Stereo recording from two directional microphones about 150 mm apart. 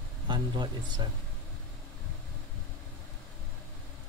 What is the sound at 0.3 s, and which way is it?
Speech, 30° right (ahead or behind).